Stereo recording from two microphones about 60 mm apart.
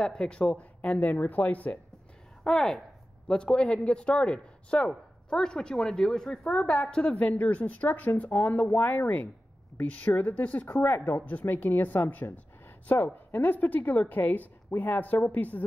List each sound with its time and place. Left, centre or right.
0.0 s speech: centre
2.4 s speech: centre; by 15.6 s left